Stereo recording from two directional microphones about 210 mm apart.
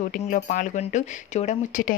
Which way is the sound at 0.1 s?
35° left (ahead or behind).